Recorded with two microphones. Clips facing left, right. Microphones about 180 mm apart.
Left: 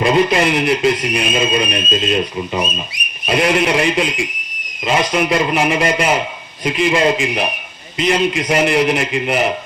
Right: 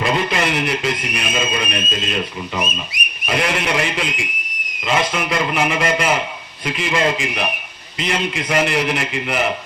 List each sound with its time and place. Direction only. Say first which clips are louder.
0.0 s speech: left 6 dB; 25° left (ahead or behind)